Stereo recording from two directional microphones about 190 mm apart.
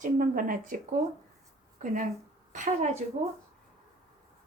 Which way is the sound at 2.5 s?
40° right (ahead or behind).